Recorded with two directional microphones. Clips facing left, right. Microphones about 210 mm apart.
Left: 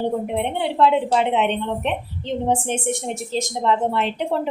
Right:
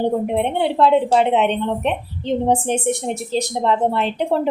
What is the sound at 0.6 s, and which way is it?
A woman's voice, 40° right (ahead or behind).